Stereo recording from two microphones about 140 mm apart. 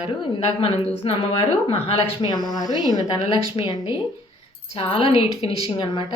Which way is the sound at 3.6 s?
40° left (ahead or behind).